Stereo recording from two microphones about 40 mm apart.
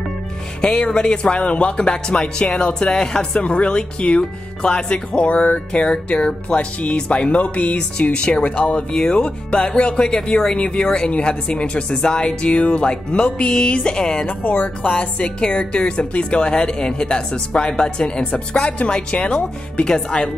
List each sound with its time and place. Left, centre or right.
0.6 s a woman's voice: left
5.3 s music: left
5.8 s a woman's voice: left
14.2 s speech: left
14.8 s a woman's voice: left